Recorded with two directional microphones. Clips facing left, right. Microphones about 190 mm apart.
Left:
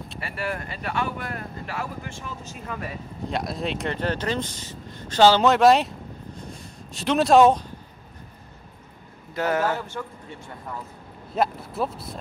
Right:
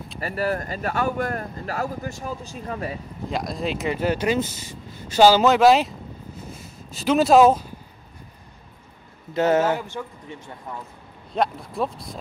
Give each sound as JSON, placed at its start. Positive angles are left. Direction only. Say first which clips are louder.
{"t": 0.2, "sound": "speech", "louder": "right 6 dB", "side_deg": -40}
{"t": 3.3, "sound": "speech", "louder": "right 1 dB", "side_deg": 0}
{"t": 9.3, "sound": "speech", "louder": "right 4 dB", "side_deg": -20}
{"t": 11.3, "sound": "speech", "louder": "right 1 dB", "side_deg": 5}